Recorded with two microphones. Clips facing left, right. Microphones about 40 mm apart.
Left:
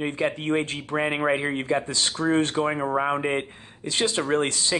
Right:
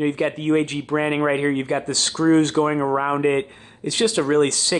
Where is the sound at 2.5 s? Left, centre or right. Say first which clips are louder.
Right 5 dB; centre.